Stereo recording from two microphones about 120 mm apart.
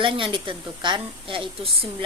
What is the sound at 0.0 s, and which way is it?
A woman's voice, 45° right (ahead or behind).